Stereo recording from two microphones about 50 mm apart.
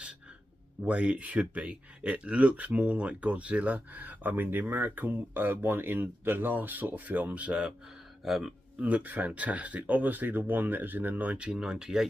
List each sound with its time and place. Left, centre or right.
0.8 s speech: right
8.3 s speech: centre
8.8 s speech: right
11.6 s speech: centre